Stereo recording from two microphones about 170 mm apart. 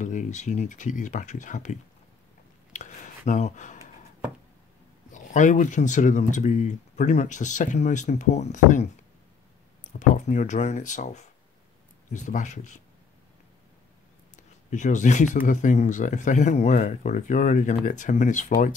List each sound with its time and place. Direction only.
0.0 s speech: 45° left (ahead or behind)
2.7 s a sound: 45° left (ahead or behind)
5.1 s speech: 45° left (ahead or behind)
9.9 s speech: 45° left (ahead or behind)
14.3 s a sound: 45° left (ahead or behind)
15.4 s speech: 45° left (ahead or behind)